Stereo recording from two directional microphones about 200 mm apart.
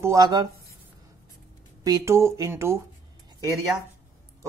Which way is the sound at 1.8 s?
15° right (ahead or behind).